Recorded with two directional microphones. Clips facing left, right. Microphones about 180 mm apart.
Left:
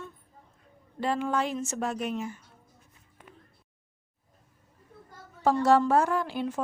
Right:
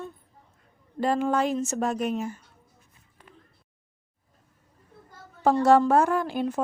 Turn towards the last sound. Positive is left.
turn(degrees=-45)  # may be behind; listen again after turning